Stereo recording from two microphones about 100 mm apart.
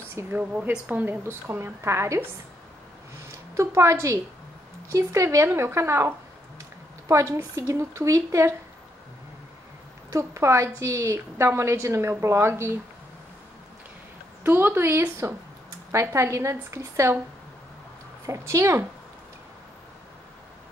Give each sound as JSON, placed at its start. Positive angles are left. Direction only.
{"t": 0.1, "sound": "a woman's voice", "side_deg": -20}
{"t": 3.3, "sound": "a woman's voice", "side_deg": -30}
{"t": 10.1, "sound": "a woman's voice", "side_deg": -30}
{"t": 14.4, "sound": "a woman's voice", "side_deg": -20}
{"t": 18.2, "sound": "a woman's voice", "side_deg": -30}